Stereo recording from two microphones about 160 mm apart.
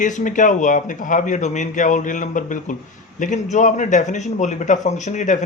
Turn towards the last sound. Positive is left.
turn(degrees=50)  # may be behind; listen again after turning